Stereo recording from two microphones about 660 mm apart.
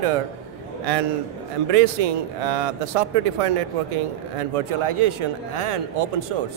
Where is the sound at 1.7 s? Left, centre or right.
Right.